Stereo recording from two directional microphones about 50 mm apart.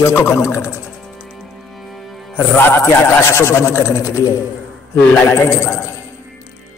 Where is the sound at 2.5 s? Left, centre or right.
Left.